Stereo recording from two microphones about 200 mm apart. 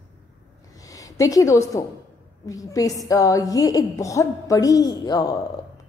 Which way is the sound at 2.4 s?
15° left (ahead or behind).